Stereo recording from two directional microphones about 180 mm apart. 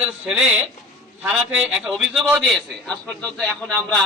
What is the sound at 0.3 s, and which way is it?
A man's voice, 5° right (ahead or behind).